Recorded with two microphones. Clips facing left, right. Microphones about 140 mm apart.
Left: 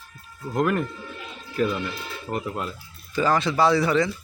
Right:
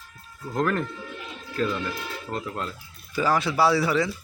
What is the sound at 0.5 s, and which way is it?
Speech, 10° left (ahead or behind).